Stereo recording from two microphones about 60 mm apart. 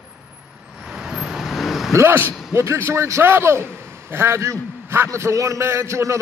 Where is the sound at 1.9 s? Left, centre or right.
Right.